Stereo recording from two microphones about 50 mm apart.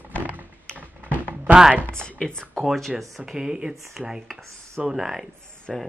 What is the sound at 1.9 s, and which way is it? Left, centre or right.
Speech, centre.